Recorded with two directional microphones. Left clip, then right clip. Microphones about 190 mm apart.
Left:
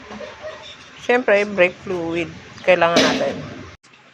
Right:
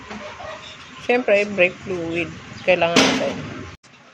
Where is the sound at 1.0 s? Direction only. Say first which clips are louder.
Left 1 dB; 15° left (ahead or behind).